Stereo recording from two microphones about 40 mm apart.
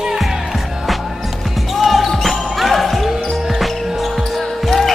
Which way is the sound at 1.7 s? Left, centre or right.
Centre.